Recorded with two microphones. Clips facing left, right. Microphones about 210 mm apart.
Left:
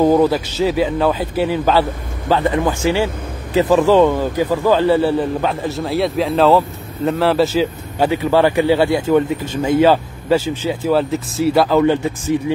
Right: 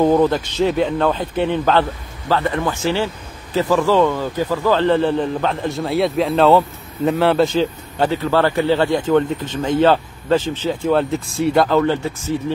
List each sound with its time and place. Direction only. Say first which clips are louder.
0.0 s a man's voice: left 1 dB; 5° left (ahead or behind)